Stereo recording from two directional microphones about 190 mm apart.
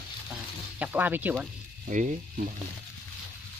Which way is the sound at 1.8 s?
40° right (ahead or behind).